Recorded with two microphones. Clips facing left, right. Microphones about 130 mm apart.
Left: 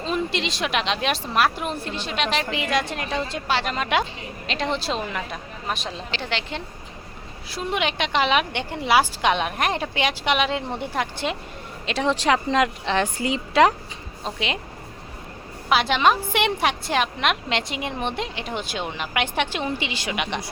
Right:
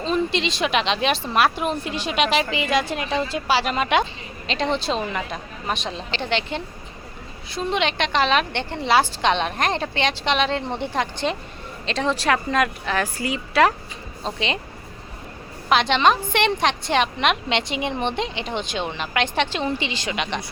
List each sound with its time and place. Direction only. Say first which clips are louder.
0.0 s a woman's voice: right 3 dB; 5° left (ahead or behind)
1.8 s a woman's voice: right 4 dB; 15° right (ahead or behind); by 13.7 s 20° left (ahead or behind)
14.3 s a woman's voice: right 2 dB; 5° left (ahead or behind)
15.7 s a woman's voice: right 1 dB; 5° left (ahead or behind)